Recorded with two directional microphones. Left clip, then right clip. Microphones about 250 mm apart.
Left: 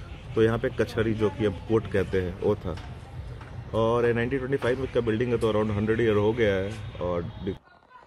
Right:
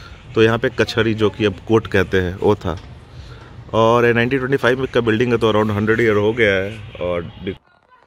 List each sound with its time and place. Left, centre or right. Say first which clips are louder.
0.3 s speech: right 9 dB; right
3.7 s speech: right 10 dB; right; by 7.5 s centre